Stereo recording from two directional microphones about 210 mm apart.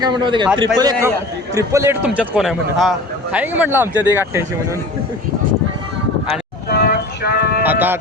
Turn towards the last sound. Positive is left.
turn(degrees=-10)  # may be behind; listen again after turning